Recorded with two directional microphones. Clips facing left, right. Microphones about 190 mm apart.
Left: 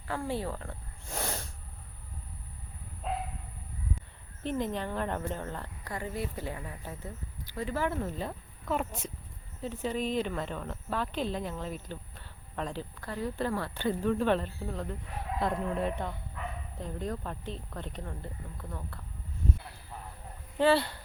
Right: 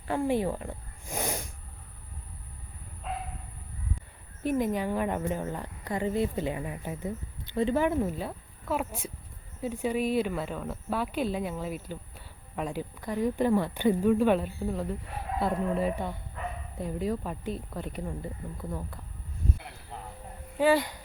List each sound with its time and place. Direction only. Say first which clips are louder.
0.1 s speech: right 6 dB; 20° right (ahead or behind)
4.4 s speech: right 5 dB; 10° right (ahead or behind)
20.6 s speech: right 1 dB; 10° right (ahead or behind)